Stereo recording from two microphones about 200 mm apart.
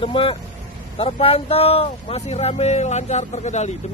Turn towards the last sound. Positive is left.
turn(degrees=35)  # may be behind; listen again after turning